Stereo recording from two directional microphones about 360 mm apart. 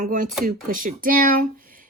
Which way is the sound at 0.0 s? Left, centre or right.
Right.